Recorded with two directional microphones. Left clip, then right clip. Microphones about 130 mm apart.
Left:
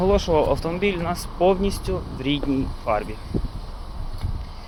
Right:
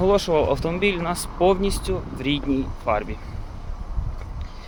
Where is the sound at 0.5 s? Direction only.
10° right (ahead or behind).